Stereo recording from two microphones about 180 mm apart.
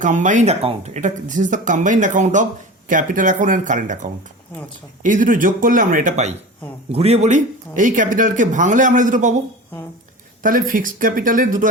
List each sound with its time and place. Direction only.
0.0 s speech: 45° right (ahead or behind)
5.0 s speech: 45° right (ahead or behind)
10.4 s speech: 50° right (ahead or behind)